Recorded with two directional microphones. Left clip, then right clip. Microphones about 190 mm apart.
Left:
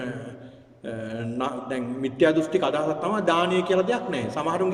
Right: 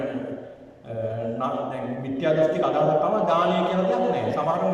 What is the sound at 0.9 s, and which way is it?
A man's voice, 50° left (ahead or behind).